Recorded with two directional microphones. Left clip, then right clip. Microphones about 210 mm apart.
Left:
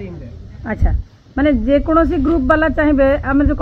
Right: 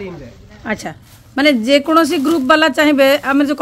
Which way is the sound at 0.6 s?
15° right (ahead or behind).